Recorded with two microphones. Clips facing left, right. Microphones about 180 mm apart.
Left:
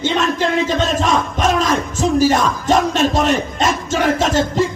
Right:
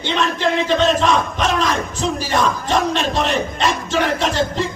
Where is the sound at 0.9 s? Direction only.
45° left (ahead or behind).